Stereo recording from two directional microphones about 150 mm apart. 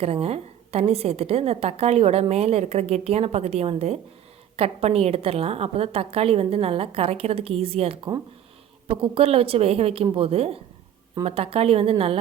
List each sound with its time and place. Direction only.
0.0 s a woman's voice: 40° right (ahead or behind)